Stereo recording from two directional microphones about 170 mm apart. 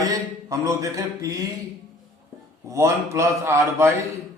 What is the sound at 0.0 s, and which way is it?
A man's voice, 20° right (ahead or behind).